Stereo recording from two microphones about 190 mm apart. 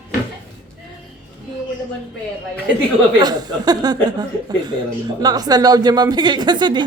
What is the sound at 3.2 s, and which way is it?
Speech, 20° right (ahead or behind).